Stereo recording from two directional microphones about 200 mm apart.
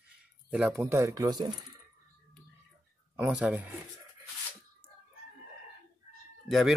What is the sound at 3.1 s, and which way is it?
Speech, 5° right (ahead or behind).